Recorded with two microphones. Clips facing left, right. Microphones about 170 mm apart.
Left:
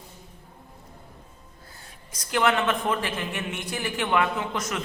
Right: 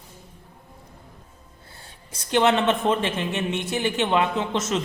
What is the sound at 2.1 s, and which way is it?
A man's voice, 25° right (ahead or behind).